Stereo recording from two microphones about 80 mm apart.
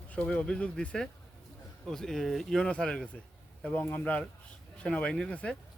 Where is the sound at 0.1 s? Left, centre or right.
Centre.